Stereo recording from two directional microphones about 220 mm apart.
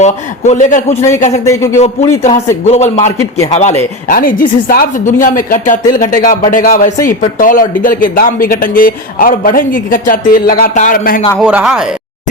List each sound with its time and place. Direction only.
0.0 s speech: 35° left (ahead or behind)
1.5 s speech: 10° left (ahead or behind)
1.8 s speech: 30° left (ahead or behind)
11.3 s speech: 5° right (ahead or behind)